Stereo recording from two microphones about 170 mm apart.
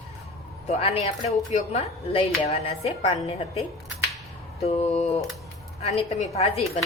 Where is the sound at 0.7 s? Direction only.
35° left (ahead or behind).